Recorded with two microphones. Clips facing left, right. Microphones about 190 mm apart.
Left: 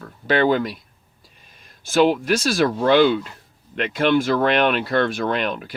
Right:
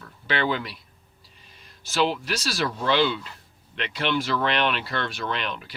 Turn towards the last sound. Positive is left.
turn(degrees=50)  # may be behind; listen again after turning